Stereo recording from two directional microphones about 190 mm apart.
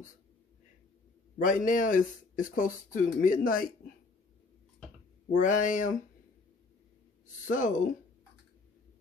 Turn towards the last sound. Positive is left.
turn(degrees=40)  # may be behind; listen again after turning